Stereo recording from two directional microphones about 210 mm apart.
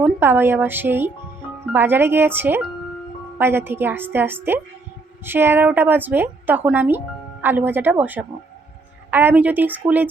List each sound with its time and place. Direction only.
0.0 s a woman's voice: 10° right (ahead or behind)